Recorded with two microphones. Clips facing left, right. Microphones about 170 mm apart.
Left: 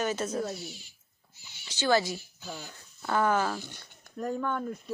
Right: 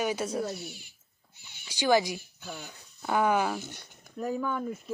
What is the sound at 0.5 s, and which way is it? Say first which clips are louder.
Speech: even; 60° right (ahead or behind).